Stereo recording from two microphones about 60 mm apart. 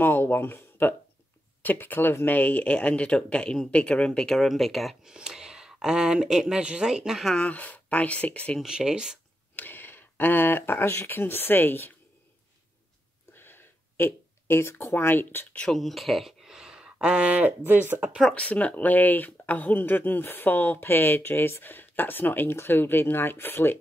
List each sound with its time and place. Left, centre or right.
0.0 s speech: left; by 4.3 s centre
4.3 s speech: centre
5.1 s speech: centre
7.3 s speech: left
8.6 s speech: centre
9.6 s speech: left
13.3 s a sound: left
15.7 s speech: centre; by 17.6 s right
17.6 s speech: right
18.3 s speech: left